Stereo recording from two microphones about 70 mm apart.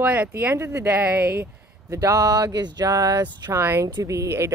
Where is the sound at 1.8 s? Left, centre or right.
Right.